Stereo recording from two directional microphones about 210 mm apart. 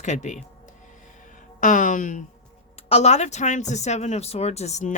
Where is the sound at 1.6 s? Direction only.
40° left (ahead or behind).